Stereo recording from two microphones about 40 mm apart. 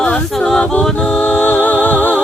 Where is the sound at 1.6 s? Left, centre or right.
Left.